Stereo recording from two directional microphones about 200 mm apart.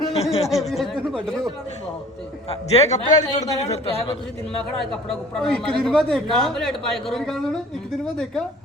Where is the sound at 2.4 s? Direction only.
35° left (ahead or behind).